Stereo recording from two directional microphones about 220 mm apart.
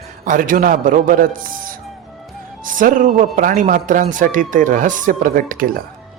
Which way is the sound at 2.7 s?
35° right (ahead or behind).